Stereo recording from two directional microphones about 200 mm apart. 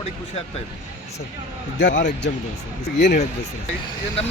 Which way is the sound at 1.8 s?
65° left (ahead or behind).